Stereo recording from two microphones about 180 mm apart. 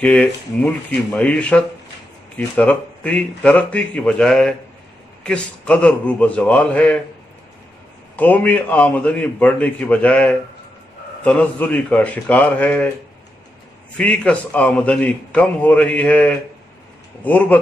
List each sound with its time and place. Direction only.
0.0 s a man's voice: 5° left (ahead or behind)
8.2 s a man's voice: 10° left (ahead or behind)
13.9 s a man's voice: 5° left (ahead or behind)